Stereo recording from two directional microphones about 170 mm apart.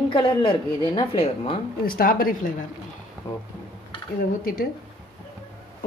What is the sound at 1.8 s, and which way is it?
Speech, 60° left (ahead or behind).